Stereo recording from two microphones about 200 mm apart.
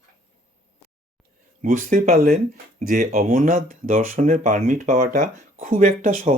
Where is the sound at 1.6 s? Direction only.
40° right (ahead or behind).